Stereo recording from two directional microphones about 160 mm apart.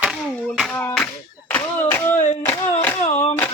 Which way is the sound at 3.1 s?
50° left (ahead or behind).